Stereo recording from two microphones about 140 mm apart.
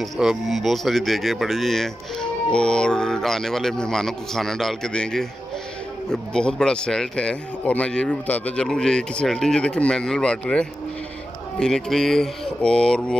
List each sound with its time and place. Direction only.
0.0 s speech: centre (ahead or behind)